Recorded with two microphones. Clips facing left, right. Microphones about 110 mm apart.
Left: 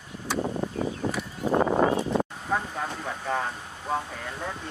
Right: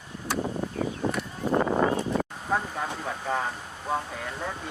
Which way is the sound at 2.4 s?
5° right (ahead or behind).